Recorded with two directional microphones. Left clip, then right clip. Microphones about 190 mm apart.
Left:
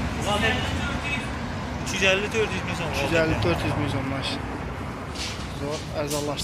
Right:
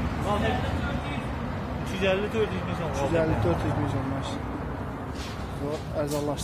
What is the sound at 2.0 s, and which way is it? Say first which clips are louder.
Speech: left 4 dB; 60° right (ahead or behind).